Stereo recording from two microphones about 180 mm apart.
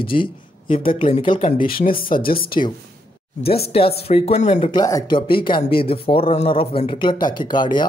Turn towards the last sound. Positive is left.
turn(degrees=25)  # may be behind; listen again after turning